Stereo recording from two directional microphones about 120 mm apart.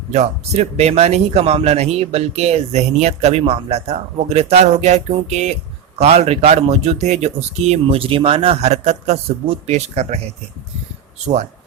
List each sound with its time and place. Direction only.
0.1 s speech: 70° right (ahead or behind)